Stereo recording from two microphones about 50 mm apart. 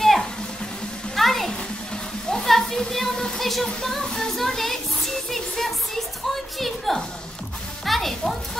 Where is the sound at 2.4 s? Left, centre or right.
Centre.